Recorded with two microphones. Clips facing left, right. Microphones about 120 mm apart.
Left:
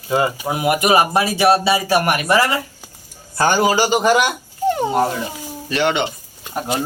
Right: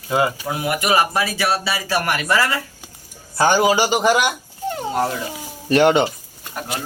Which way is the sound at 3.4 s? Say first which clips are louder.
Even; 15° right (ahead or behind).